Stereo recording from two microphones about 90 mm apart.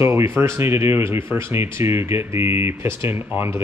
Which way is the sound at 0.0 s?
30° right (ahead or behind).